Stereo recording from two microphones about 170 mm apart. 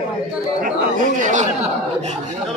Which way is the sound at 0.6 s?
50° right (ahead or behind).